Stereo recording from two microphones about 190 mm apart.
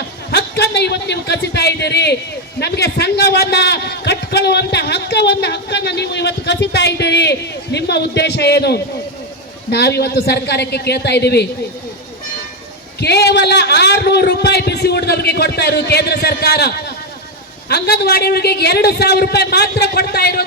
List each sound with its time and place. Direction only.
0.3 s a sound: 60° left (ahead or behind)
2.6 s a man's voice: 60° left (ahead or behind)
13.0 s a man's voice: 60° left (ahead or behind)